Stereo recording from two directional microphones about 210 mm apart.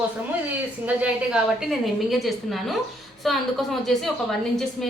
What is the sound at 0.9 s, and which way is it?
A woman's voice, 5° right (ahead or behind).